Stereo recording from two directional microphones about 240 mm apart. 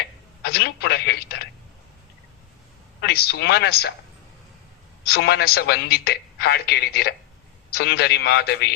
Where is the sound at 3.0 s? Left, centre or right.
Left.